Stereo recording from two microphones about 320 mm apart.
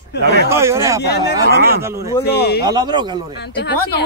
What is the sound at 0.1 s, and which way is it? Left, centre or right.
Speech, left.